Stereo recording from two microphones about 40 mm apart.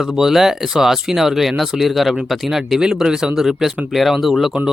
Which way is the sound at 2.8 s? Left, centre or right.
Centre.